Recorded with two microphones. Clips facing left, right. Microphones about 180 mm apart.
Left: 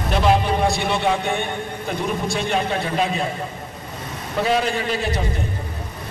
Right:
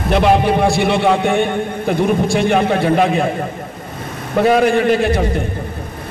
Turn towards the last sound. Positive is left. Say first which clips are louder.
# right 10 dB
turn(degrees=-55)  # may be behind; listen again after turning